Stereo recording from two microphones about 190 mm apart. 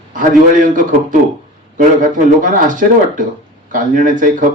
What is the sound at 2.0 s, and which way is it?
Speech, 45° right (ahead or behind).